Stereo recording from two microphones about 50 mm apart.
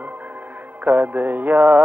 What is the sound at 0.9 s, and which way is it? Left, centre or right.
Mantra, right.